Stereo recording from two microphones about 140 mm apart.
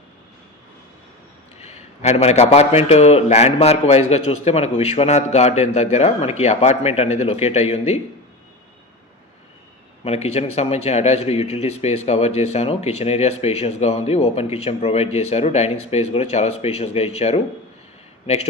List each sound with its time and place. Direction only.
1.5 s speech: 50° left (ahead or behind)
10.0 s speech: 50° left (ahead or behind)